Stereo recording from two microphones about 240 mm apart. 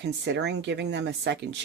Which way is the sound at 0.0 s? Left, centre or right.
Right.